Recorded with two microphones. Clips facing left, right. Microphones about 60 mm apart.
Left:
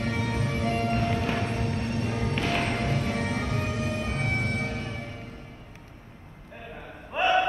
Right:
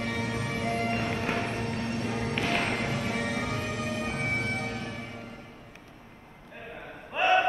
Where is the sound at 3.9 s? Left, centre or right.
Right.